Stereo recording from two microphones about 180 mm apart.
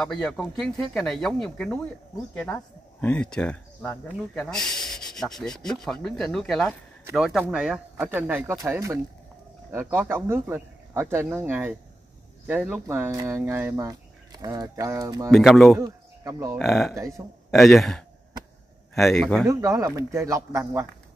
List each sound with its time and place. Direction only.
0.0 s speech: 5° left (ahead or behind); by 15.3 s 20° right (ahead or behind)
15.3 s speech: centre (ahead or behind)
15.8 s speech: 20° right (ahead or behind)
16.5 s speech: centre (ahead or behind)
19.4 s speech: 15° right (ahead or behind)